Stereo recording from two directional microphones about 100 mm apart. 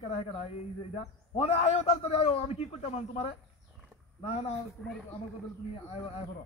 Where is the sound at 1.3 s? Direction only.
90° left.